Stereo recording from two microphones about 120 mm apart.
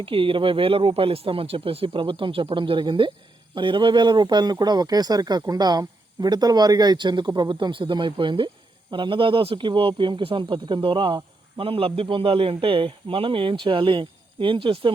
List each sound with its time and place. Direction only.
0.0 s speech: 45° right (ahead or behind)